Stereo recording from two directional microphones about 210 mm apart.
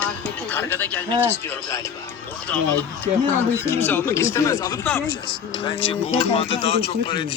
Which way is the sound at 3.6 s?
10° left (ahead or behind).